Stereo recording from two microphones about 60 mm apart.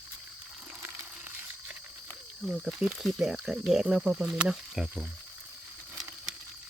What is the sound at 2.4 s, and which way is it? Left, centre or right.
Speech, centre.